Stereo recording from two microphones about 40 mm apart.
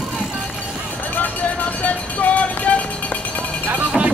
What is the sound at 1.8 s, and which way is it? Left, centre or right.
Music, left.